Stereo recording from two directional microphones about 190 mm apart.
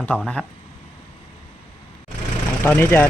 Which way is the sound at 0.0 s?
5° left (ahead or behind).